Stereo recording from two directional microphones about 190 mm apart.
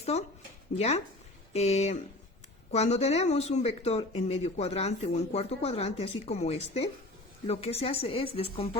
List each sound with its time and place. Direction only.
0.0 s speech: 35° left (ahead or behind)